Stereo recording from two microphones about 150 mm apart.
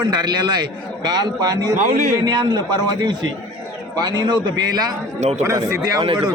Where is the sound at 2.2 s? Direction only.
30° right (ahead or behind).